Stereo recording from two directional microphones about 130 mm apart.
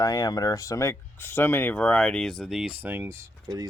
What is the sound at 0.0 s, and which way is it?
Speech, 30° left (ahead or behind).